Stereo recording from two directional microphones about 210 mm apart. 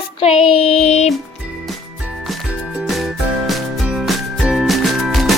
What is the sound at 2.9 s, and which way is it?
Music, centre (ahead or behind).